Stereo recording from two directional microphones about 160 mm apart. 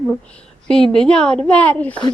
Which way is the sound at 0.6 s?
5° left (ahead or behind).